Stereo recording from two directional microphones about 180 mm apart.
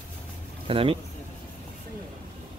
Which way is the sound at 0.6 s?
30° right (ahead or behind).